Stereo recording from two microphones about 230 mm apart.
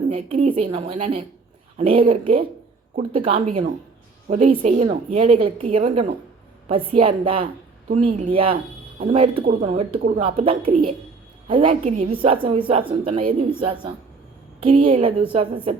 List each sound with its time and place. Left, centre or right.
0.1 s a woman's voice: right